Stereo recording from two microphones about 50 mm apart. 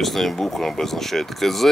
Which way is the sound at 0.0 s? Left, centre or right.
Centre.